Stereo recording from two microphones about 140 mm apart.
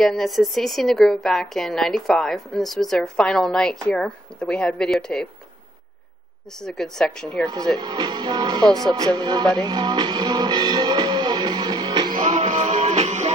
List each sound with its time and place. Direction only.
0.0 s a woman's voice: centre (ahead or behind)
6.6 s a woman's voice: 5° left (ahead or behind)
7.8 s speech: 30° right (ahead or behind)
9.6 s music: 30° right (ahead or behind)
12.2 s music: 60° right (ahead or behind)